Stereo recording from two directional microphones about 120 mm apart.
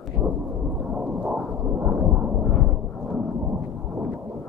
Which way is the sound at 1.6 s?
15° right (ahead or behind).